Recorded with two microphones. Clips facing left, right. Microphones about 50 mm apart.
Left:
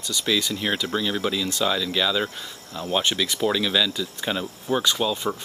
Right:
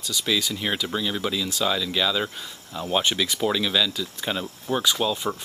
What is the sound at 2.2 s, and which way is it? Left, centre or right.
Speech, centre.